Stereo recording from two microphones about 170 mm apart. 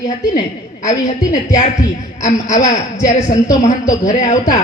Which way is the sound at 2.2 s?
45° left (ahead or behind).